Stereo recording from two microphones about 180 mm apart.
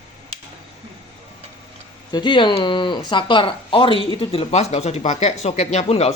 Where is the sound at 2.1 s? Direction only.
25° left (ahead or behind).